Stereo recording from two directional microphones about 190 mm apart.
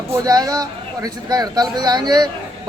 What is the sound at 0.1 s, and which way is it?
A man's voice, 20° right (ahead or behind).